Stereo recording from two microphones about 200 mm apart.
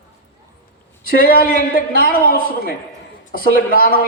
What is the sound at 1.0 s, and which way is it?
A man's voice, 45° left (ahead or behind).